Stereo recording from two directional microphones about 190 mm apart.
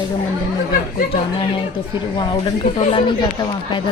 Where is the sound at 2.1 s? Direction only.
25° left (ahead or behind).